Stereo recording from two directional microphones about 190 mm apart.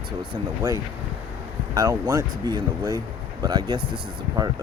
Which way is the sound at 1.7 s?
15° right (ahead or behind).